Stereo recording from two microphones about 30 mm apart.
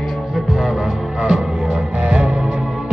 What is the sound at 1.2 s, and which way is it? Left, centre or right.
Music, right.